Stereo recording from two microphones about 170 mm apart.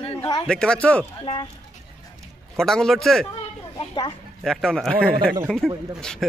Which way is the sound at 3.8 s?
30° left (ahead or behind).